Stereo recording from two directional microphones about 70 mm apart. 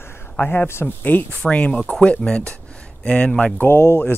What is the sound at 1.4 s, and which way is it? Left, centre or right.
Speech, centre.